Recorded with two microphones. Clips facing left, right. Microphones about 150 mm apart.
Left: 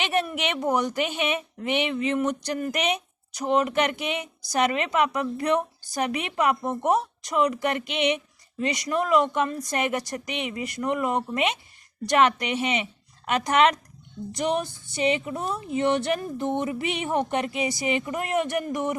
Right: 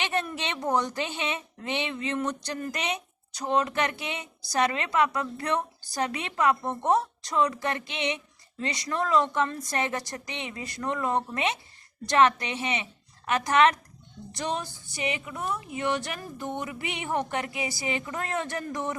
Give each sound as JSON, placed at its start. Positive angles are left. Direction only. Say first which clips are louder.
{"t": 0.0, "sound": "speech", "louder": "left 4 dB", "side_deg": 15}